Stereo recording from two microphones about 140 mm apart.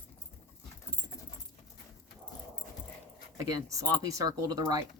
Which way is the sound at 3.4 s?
25° right (ahead or behind).